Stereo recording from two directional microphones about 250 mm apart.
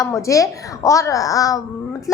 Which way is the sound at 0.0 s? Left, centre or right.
Centre.